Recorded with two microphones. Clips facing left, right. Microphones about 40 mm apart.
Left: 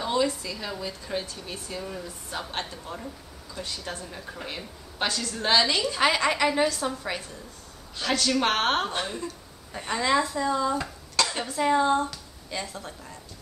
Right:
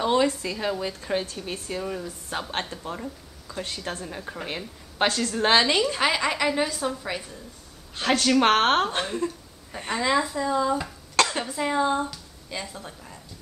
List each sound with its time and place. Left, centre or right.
0.0 s a sound: right
0.4 s a woman's voice: right
2.7 s speech: right
3.6 s a woman's voice: right
4.2 s a woman's voice: centre
5.0 s a woman's voice: right
5.9 s a woman's voice: centre
8.0 s a woman's voice: right
9.7 s a woman's voice: centre